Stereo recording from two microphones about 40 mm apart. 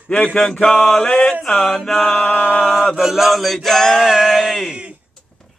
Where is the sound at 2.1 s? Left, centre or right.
Left.